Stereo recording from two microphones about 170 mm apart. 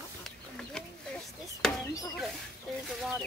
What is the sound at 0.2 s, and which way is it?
Chicken, 5° left (ahead or behind).